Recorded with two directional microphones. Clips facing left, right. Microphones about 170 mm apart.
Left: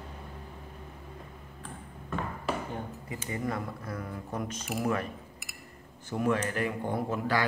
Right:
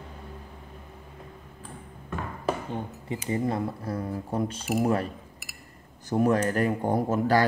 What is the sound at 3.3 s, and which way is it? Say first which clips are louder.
Speech: right 6 dB; 30° right (ahead or behind).